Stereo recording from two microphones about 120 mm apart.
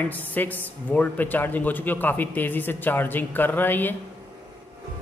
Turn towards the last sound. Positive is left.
turn(degrees=15)  # may be behind; listen again after turning